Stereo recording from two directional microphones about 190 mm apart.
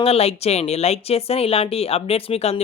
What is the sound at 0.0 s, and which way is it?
Speech, 30° left (ahead or behind).